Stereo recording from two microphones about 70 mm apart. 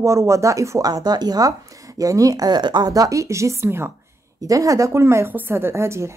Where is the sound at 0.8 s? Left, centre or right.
Right.